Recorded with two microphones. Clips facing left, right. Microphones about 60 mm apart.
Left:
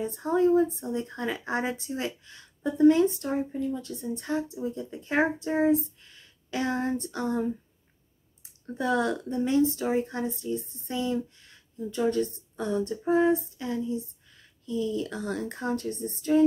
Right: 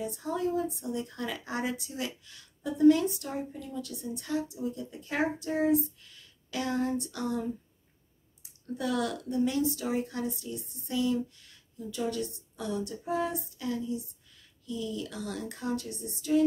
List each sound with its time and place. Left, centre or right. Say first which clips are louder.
0.0 s speech: left 7 dB; left